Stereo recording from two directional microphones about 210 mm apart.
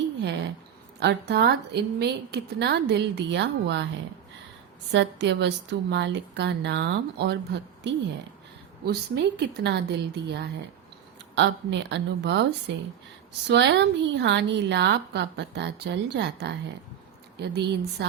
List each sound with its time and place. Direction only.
0.2 s a sound: 55° right (ahead or behind)
0.9 s a woman's voice: 50° right (ahead or behind)
4.9 s a woman's voice: 55° right (ahead or behind)